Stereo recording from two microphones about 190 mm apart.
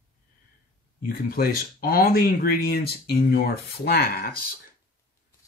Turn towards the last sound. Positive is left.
turn(degrees=50)  # may be behind; listen again after turning